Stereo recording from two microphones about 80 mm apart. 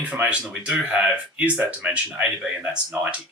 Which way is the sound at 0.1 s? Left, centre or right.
Centre.